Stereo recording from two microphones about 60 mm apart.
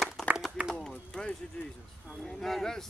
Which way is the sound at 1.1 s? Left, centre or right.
Centre.